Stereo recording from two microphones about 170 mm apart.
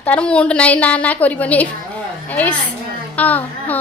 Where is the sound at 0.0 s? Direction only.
5° left (ahead or behind).